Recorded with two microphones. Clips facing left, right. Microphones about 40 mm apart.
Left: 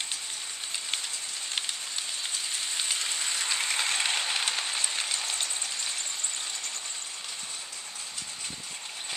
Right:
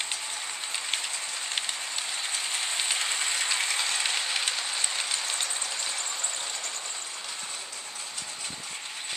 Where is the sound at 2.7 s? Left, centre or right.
Right.